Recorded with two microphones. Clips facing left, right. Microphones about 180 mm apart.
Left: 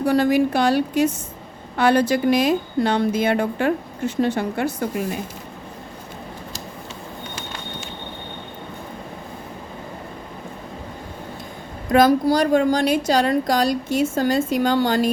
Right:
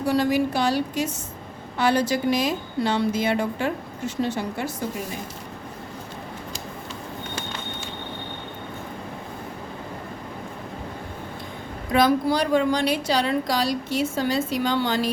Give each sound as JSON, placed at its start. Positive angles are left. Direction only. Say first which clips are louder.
{"t": 0.0, "sound": "a woman's voice", "louder": "left 4 dB", "side_deg": 55}
{"t": 11.9, "sound": "a woman's voice", "louder": "left 4 dB", "side_deg": 45}